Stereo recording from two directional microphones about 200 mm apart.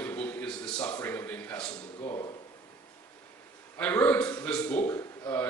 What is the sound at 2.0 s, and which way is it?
Speech, 25° left (ahead or behind).